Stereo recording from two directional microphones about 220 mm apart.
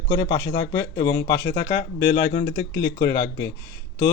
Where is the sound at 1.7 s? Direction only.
45° left (ahead or behind).